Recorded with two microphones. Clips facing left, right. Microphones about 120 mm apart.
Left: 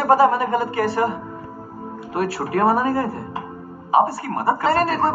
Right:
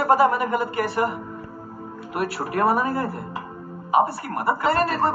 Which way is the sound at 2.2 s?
30° left (ahead or behind).